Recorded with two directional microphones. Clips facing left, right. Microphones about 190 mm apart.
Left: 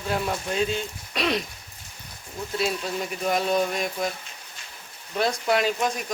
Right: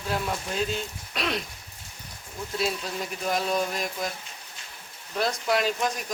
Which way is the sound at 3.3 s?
Centre (ahead or behind).